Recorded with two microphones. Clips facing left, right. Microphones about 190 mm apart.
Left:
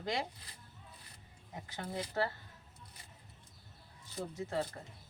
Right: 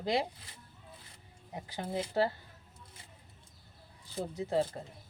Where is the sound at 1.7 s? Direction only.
30° right (ahead or behind).